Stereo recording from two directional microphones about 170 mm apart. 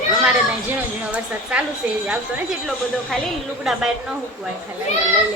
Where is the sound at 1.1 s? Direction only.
5° right (ahead or behind).